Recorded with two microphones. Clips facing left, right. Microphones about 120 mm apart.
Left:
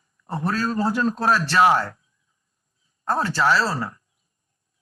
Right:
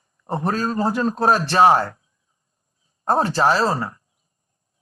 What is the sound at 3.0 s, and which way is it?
Speech, 30° right (ahead or behind).